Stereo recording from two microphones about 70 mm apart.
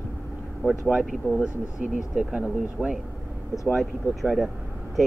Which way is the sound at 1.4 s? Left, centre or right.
Centre.